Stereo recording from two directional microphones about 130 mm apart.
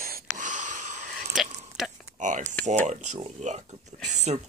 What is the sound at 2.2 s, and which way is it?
Speech, 75° right (ahead or behind).